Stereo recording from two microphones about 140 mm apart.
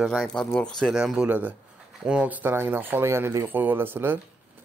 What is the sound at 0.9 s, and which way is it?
Speech, 5° right (ahead or behind).